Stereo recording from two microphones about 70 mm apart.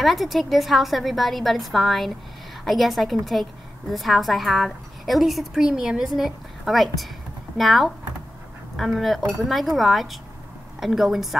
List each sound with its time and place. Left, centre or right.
0.0 s a woman's voice: centre